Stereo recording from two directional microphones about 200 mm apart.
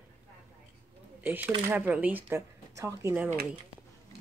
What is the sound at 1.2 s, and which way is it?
Speech, 10° right (ahead or behind).